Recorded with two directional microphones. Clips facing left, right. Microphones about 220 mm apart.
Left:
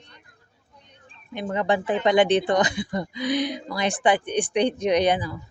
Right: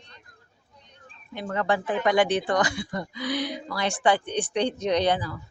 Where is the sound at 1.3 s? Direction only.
20° left (ahead or behind).